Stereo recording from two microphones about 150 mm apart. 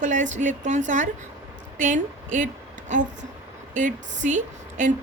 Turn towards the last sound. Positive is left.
turn(degrees=-55)  # may be behind; listen again after turning